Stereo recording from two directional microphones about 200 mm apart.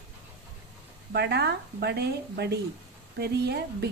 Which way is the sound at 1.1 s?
55° right (ahead or behind).